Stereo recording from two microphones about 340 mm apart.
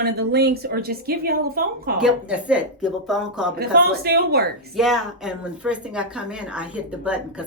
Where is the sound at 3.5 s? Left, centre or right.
Right.